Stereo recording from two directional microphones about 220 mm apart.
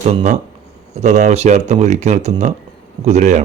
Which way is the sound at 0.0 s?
30° right (ahead or behind).